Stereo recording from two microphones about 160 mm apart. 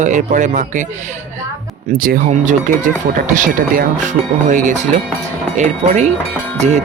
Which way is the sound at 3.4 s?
55° right (ahead or behind).